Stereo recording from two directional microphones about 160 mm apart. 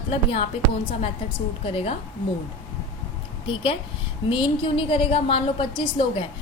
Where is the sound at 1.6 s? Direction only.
35° left (ahead or behind).